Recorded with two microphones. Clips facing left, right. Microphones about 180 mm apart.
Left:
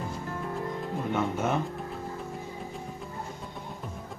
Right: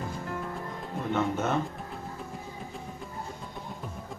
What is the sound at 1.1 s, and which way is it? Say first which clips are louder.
Speech: right 1 dB; 10° left (ahead or behind).